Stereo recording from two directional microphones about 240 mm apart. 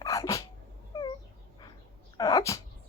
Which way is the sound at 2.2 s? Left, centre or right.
Centre.